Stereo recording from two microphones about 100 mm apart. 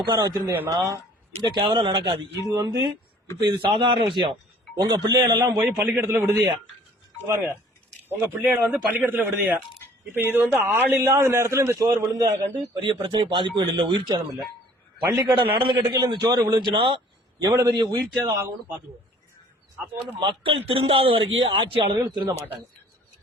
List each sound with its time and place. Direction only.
0.0 s a man's voice: 45° right (ahead or behind)
2.4 s a man's voice: 35° right (ahead or behind)
3.4 s a man's voice: 55° right (ahead or behind)
4.8 s a man's voice: 45° right (ahead or behind)
5.4 s speech: 20° right (ahead or behind)
8.1 s speech: 20° right (ahead or behind)
12.8 s a man's voice: 50° right (ahead or behind)
14.9 s a man's voice: 40° right (ahead or behind)
15.4 s a man's voice: 60° right (ahead or behind)
15.7 s a man's voice: 35° right (ahead or behind); by 17.0 s 55° right (ahead or behind)
17.4 s a man's voice: 35° right (ahead or behind)
20.0 s a man's voice: 55° right (ahead or behind)